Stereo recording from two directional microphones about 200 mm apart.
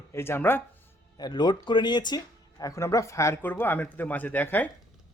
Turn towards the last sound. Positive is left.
turn(degrees=10)  # may be behind; listen again after turning